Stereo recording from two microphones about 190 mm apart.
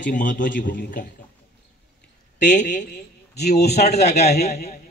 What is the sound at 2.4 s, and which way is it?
Speech, 40° left (ahead or behind).